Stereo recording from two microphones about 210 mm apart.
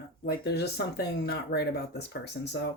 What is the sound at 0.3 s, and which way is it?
Speech, 50° left (ahead or behind).